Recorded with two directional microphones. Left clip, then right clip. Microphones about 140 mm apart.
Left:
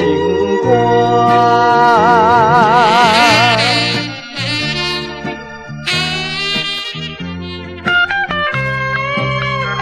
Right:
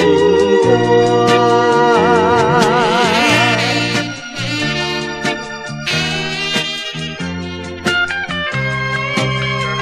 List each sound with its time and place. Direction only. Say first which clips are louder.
0.1 s organ: right 3 dB; 45° right (ahead or behind)
1.4 s music: left 2 dB; 45° right (ahead or behind)
7.8 s music: left 3 dB; 45° right (ahead or behind)